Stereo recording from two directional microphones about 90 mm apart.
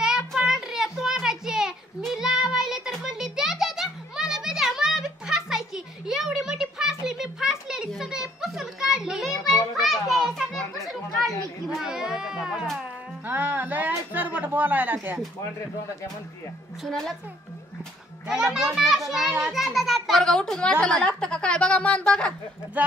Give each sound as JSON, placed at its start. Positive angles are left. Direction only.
{"t": 0.0, "sound": "a sound", "side_deg": -5}
{"t": 2.0, "sound": "music", "side_deg": -5}
{"t": 9.5, "sound": "children playing", "side_deg": 0}
{"t": 13.3, "sound": "a sound", "side_deg": -20}
{"t": 16.8, "sound": "a child's voice", "side_deg": 5}
{"t": 18.2, "sound": "a child's voice", "side_deg": -5}
{"t": 22.8, "sound": "speech", "side_deg": -15}